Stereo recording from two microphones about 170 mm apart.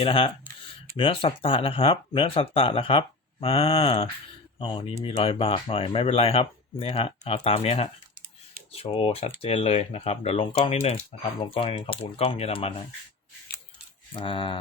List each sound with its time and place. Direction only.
0.0 s speech: 30° left (ahead or behind)
14.1 s speech: 30° left (ahead or behind)